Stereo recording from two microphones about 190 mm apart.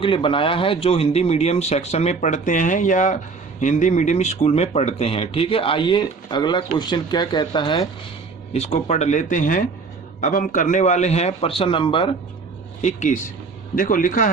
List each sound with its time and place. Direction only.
0.0 s speech: 25° left (ahead or behind)
8.5 s speech: 35° left (ahead or behind)
12.8 s a man's voice: 40° left (ahead or behind)